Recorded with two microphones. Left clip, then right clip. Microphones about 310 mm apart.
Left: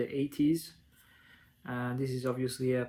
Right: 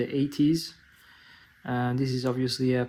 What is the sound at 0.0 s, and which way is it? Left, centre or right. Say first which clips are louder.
Speech: right 5 dB; right.